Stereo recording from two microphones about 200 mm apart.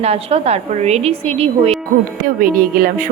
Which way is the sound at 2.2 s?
45° right (ahead or behind).